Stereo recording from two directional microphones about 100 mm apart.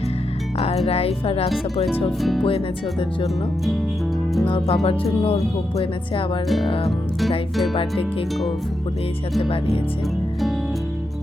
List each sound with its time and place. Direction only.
0.9 s speech: 80° left
4.6 s speech: 85° left
5.7 s speech: 65° left (ahead or behind)
7.5 s speech: centre (ahead or behind)
9.4 s speech: 70° left (ahead or behind)